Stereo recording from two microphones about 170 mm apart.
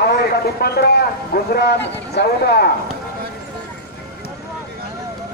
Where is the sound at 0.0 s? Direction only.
70° left (ahead or behind).